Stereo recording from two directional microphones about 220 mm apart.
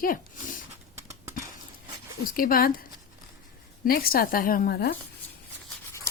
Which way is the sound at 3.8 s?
40° left (ahead or behind).